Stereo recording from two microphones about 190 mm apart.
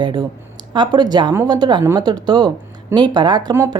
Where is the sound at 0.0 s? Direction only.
20° right (ahead or behind).